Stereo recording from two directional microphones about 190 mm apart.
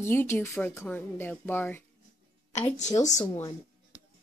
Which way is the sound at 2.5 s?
35° left (ahead or behind).